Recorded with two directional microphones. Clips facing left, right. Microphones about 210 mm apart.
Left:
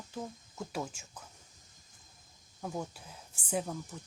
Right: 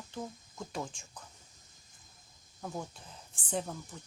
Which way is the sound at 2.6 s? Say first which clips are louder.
Left 2 dB; 5° left (ahead or behind).